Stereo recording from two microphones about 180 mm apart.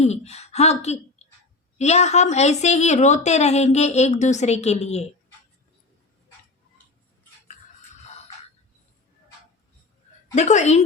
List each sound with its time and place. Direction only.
0.0 s a woman's voice: 35° left (ahead or behind)
8.0 s a sound: 40° left (ahead or behind)
10.3 s a woman's voice: 40° left (ahead or behind)